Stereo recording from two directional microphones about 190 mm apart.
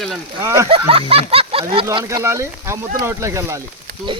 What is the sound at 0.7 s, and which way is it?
Speech, 30° right (ahead or behind).